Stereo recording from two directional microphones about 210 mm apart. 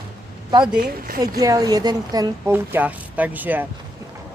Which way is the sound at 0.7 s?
45° right (ahead or behind).